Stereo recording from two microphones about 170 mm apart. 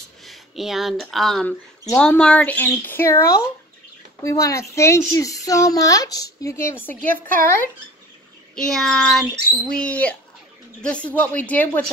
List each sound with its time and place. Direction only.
0.2 s a woman's voice: centre (ahead or behind)
8.5 s speech: 5° left (ahead or behind)